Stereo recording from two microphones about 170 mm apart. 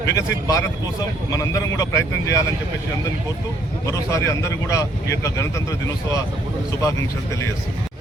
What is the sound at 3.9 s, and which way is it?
Speech, 15° left (ahead or behind).